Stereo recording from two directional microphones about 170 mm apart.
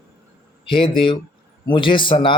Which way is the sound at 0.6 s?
30° left (ahead or behind).